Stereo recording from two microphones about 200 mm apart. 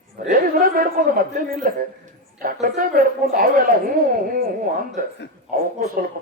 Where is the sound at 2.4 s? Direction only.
45° right (ahead or behind).